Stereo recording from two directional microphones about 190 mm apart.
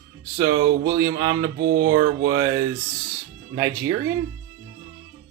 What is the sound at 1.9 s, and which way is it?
Speech, 25° right (ahead or behind).